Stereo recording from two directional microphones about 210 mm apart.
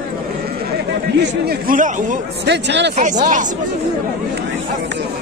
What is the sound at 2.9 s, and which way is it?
Speech, 35° right (ahead or behind).